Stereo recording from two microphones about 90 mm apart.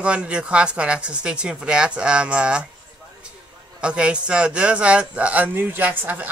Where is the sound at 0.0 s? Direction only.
10° right (ahead or behind).